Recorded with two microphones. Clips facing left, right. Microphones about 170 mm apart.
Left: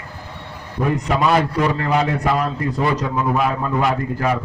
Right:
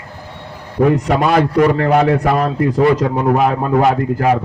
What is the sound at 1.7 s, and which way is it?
A man's voice, 60° right (ahead or behind).